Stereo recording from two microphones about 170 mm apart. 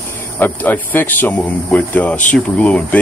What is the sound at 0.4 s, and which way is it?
A man's voice, 10° left (ahead or behind).